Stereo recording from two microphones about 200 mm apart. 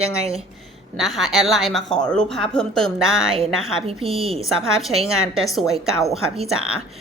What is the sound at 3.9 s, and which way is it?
Speech, 30° right (ahead or behind).